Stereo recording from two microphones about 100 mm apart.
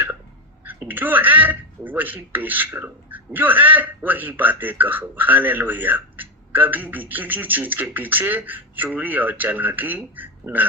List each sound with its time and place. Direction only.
0.9 s speech: 20° right (ahead or behind)